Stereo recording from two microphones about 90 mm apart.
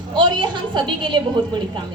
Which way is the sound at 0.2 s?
60° right (ahead or behind).